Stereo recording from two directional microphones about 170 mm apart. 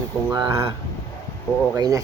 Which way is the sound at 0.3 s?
25° right (ahead or behind).